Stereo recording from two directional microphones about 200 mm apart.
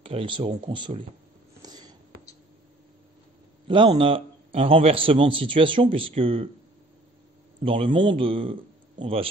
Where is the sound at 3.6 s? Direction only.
25° right (ahead or behind).